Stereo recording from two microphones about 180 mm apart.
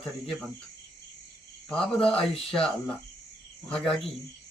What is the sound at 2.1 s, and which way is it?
Speech, 5° left (ahead or behind).